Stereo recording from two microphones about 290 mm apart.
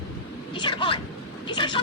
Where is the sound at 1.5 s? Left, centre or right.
Centre.